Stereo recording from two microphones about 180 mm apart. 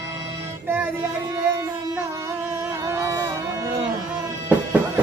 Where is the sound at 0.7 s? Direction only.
10° right (ahead or behind).